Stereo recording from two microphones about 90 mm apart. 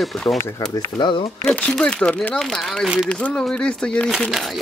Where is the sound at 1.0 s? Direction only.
70° left (ahead or behind).